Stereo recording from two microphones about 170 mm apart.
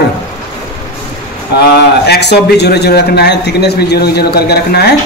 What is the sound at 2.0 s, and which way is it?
A man's voice, 75° left (ahead or behind).